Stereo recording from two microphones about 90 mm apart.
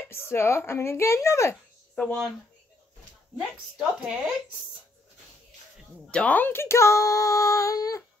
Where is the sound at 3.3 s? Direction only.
5° right (ahead or behind).